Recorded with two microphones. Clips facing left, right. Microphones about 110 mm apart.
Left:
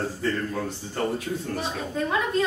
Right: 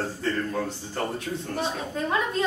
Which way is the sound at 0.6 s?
Centre (ahead or behind).